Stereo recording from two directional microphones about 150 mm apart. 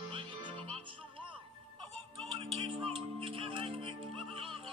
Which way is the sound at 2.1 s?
40° right (ahead or behind).